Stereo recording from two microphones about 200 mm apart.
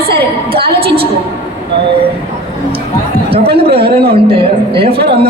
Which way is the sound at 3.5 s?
30° right (ahead or behind).